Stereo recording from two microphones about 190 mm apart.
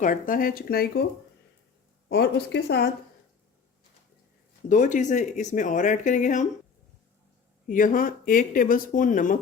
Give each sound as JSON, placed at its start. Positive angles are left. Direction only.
{"t": 0.0, "sound": "speech", "side_deg": 45}
{"t": 2.0, "sound": "a woman's voice", "side_deg": 60}
{"t": 4.7, "sound": "speech", "side_deg": 40}
{"t": 7.7, "sound": "speech", "side_deg": 45}